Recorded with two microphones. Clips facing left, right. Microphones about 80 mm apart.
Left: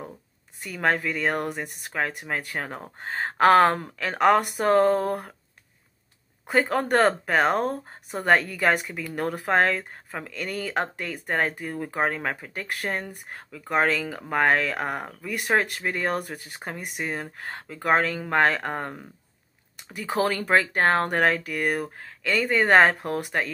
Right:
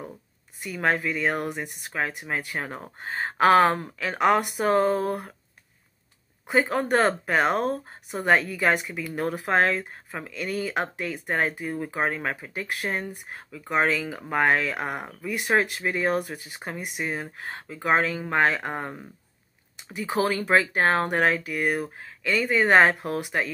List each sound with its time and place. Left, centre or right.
0.7 s speech: left
6.4 s speech: left